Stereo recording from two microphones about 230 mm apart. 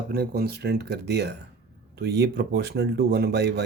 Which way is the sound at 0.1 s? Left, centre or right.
Right.